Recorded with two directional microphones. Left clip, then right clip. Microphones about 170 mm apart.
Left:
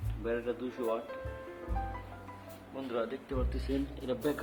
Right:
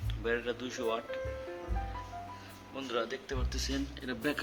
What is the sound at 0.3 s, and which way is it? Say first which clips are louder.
Speech: right 1 dB; 5° right (ahead or behind).